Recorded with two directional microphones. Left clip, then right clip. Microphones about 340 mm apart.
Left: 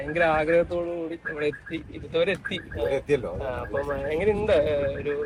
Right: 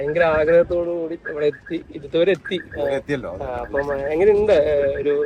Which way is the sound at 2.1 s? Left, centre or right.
Right.